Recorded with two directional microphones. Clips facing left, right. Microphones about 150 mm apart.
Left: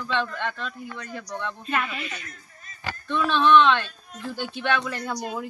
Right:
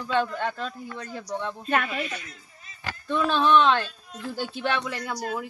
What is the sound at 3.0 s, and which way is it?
Speech, 40° right (ahead or behind).